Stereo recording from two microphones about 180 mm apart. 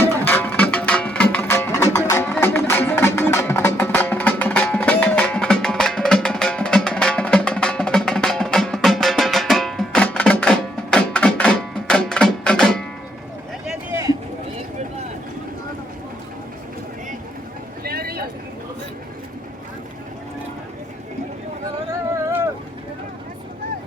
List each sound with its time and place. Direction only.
0.1 s music: 10° left (ahead or behind)
13.9 s a sound: 15° right (ahead or behind)
17.8 s vehicle: 55° right (ahead or behind)